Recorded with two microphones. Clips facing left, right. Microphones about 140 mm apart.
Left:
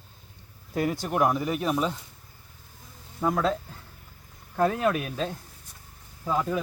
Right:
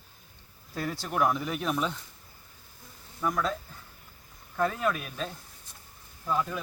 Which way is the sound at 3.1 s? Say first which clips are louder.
Left 4 dB; 30° left (ahead or behind).